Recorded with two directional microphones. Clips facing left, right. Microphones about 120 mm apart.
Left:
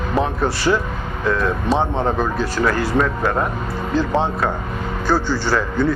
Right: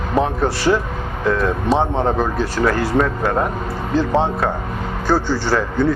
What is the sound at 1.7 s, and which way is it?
A man's voice, 25° right (ahead or behind).